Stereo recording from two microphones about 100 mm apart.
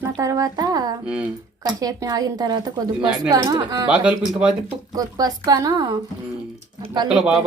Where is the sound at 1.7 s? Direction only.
35° right (ahead or behind).